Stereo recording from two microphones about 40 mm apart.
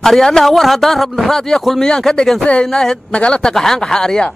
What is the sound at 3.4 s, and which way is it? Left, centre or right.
Speech, centre.